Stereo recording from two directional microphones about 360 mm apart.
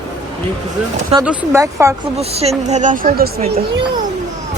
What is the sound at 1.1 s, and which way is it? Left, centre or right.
Speech, centre.